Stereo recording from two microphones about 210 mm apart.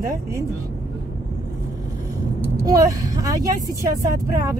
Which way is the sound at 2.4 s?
15° right (ahead or behind).